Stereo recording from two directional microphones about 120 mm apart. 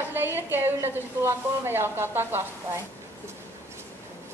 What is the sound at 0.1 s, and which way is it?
A woman's voice, 20° right (ahead or behind).